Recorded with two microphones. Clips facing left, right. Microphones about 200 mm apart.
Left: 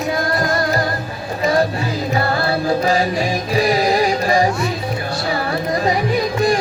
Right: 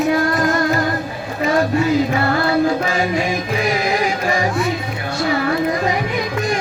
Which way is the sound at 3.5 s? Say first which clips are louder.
Left 6 dB; 35° left (ahead or behind).